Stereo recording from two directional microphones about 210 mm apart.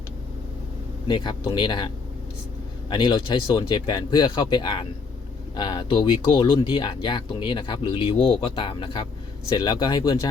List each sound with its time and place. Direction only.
1.0 s speech: 20° left (ahead or behind)
2.9 s speech: 20° left (ahead or behind)